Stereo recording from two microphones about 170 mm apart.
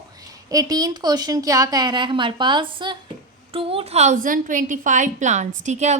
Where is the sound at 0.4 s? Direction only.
20° right (ahead or behind).